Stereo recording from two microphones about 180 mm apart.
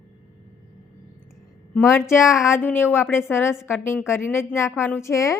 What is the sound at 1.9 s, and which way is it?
Speech, 15° left (ahead or behind).